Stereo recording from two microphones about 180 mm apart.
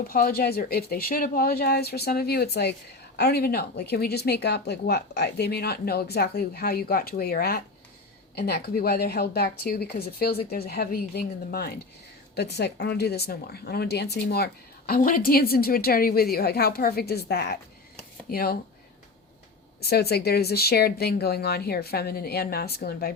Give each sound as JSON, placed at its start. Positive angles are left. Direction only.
{"t": 0.1, "sound": "a woman's voice", "side_deg": 55}
{"t": 19.8, "sound": "a woman's voice", "side_deg": 60}